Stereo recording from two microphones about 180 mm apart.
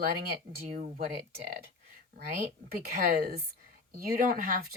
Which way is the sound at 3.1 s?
60° right (ahead or behind).